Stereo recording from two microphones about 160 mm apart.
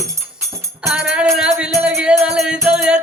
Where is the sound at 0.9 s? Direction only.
5° right (ahead or behind).